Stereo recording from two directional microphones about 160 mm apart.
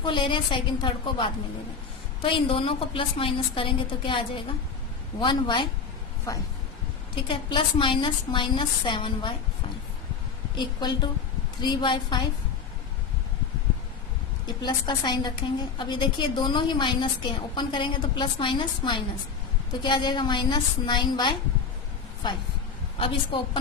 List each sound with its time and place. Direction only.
0.0 s a woman's voice: 30° left (ahead or behind)
7.2 s a woman's voice: 30° left (ahead or behind)
10.6 s a woman's voice: 30° left (ahead or behind)
14.4 s a woman's voice: 25° left (ahead or behind)
23.0 s a woman's voice: 35° left (ahead or behind)